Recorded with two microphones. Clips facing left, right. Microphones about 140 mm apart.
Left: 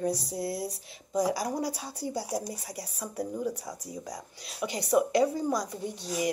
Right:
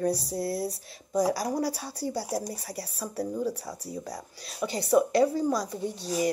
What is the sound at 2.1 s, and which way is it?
A woman's voice, 20° left (ahead or behind).